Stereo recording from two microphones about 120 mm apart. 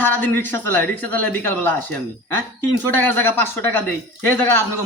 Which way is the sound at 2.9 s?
15° left (ahead or behind).